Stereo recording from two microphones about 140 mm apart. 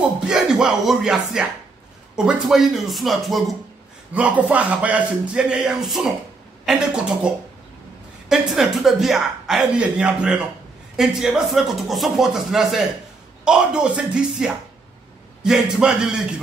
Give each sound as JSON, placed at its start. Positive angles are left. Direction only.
{"t": 0.3, "sound": "speech", "side_deg": -5}
{"t": 4.1, "sound": "a man's voice", "side_deg": -10}